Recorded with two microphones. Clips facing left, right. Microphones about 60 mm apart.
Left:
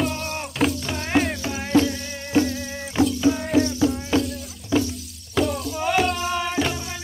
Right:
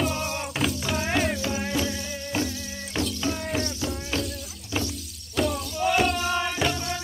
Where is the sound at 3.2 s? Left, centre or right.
Centre.